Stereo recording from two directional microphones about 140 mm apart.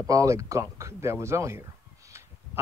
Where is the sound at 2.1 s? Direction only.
20° right (ahead or behind).